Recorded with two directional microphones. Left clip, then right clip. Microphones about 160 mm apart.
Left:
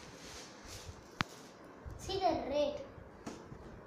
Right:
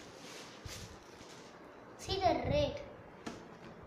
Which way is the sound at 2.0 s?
Centre (ahead or behind).